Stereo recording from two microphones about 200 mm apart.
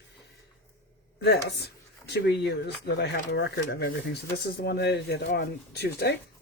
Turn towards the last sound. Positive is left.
turn(degrees=55)  # may be behind; listen again after turning